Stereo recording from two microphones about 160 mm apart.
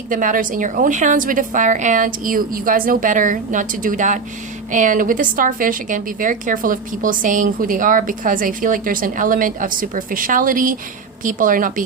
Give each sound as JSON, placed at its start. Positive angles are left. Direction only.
{"t": 0.1, "sound": "a woman's voice", "side_deg": -55}